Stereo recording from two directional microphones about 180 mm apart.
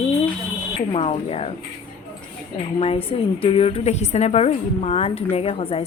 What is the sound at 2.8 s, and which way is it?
A woman's voice, 30° left (ahead or behind).